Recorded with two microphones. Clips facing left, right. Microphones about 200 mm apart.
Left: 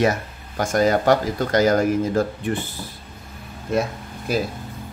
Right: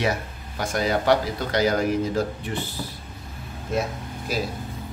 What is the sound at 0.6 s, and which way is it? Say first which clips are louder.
Speech: left 5 dB; 45° left (ahead or behind).